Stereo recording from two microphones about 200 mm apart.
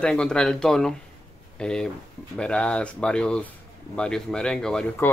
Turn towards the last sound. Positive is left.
turn(degrees=5)  # may be behind; listen again after turning